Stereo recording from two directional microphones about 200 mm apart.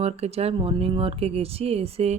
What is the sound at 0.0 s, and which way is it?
Speech, 30° right (ahead or behind).